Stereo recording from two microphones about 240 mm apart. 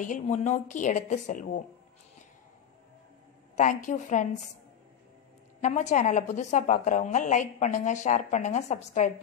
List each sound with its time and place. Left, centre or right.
0.0 s a woman's voice: left
3.5 s a woman's voice: left
5.6 s a woman's voice: left